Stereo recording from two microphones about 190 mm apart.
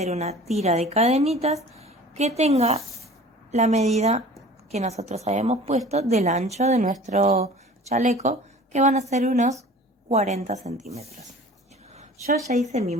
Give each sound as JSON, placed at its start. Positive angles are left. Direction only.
{"t": 0.0, "sound": "a woman's voice", "side_deg": -35}
{"t": 12.5, "sound": "speech", "side_deg": -35}